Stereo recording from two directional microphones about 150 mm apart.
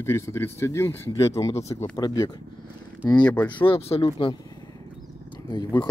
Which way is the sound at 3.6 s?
40° left (ahead or behind).